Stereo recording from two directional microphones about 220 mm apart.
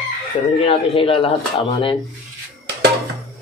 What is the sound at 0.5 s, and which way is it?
Speech, 25° left (ahead or behind).